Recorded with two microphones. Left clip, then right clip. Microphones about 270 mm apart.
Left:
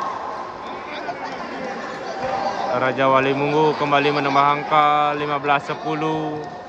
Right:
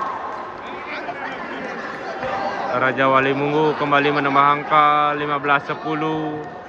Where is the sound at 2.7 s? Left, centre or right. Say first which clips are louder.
Right 1 dB; centre.